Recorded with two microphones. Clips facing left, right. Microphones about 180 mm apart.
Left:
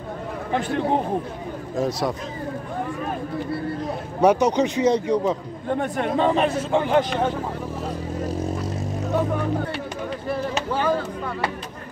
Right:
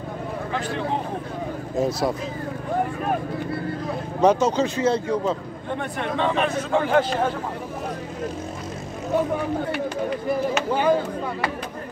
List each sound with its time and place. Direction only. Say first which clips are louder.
1.8 s speech: right 1 dB; centre (ahead or behind)
4.2 s speech: left 1 dB; 15° left (ahead or behind)
5.8 s speech: left 3 dB; 40° left (ahead or behind)
6.8 s speech: even; 15° left (ahead or behind)
10.7 s speech: right 2 dB; 15° right (ahead or behind)